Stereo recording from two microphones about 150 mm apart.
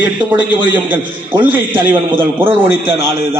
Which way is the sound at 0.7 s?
10° right (ahead or behind).